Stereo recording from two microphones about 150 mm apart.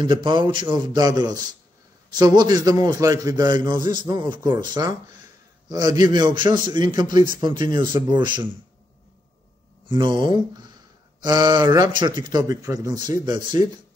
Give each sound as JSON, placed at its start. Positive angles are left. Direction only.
{"t": 0.2, "sound": "a man's voice", "side_deg": -30}
{"t": 9.8, "sound": "a man's voice", "side_deg": -30}